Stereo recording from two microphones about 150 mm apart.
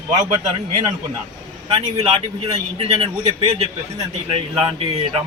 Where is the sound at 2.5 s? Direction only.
40° right (ahead or behind).